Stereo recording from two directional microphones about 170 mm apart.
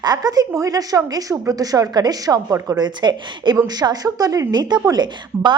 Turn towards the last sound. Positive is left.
turn(degrees=-25)  # may be behind; listen again after turning